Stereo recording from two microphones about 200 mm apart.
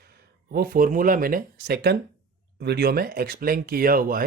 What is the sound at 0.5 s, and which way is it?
Speech, 45° right (ahead or behind).